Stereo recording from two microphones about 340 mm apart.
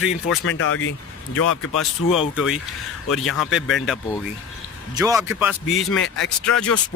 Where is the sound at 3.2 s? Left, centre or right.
Centre.